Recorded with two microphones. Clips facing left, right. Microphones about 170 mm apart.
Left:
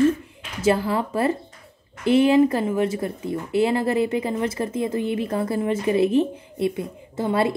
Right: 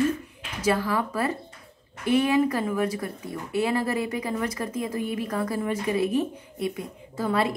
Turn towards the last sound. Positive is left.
turn(degrees=25)  # may be behind; listen again after turning